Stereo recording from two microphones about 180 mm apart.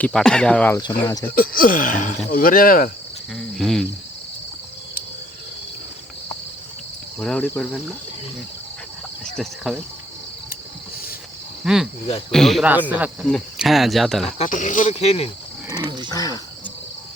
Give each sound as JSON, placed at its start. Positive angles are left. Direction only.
{"t": 0.0, "sound": "speech", "side_deg": 5}
{"t": 0.8, "sound": "cricket", "side_deg": 20}
{"t": 1.4, "sound": "speech", "side_deg": 50}
{"t": 3.5, "sound": "speech", "side_deg": 0}
{"t": 7.2, "sound": "speech", "side_deg": 5}
{"t": 9.3, "sound": "speech", "side_deg": 0}
{"t": 11.6, "sound": "speech", "side_deg": -5}
{"t": 14.3, "sound": "speech", "side_deg": 40}
{"t": 15.7, "sound": "wild animals", "side_deg": -25}
{"t": 16.0, "sound": "cricket", "side_deg": 20}